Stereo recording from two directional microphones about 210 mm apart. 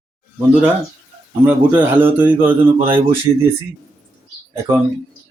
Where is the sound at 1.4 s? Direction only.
10° right (ahead or behind).